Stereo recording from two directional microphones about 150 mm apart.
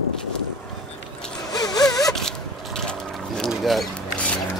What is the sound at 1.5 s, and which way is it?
Wail, 25° left (ahead or behind).